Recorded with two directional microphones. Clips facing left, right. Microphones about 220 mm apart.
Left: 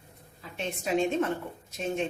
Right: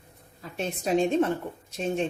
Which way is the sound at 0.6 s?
40° right (ahead or behind).